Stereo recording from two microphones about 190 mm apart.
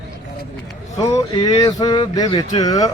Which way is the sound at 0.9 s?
15° left (ahead or behind).